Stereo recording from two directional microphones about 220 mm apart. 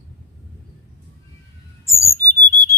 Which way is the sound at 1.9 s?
10° left (ahead or behind).